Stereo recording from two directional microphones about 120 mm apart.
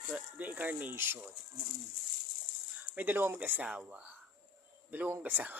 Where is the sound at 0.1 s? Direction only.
15° right (ahead or behind).